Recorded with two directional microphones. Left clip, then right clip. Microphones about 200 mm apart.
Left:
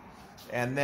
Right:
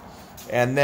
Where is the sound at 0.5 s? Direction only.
45° right (ahead or behind).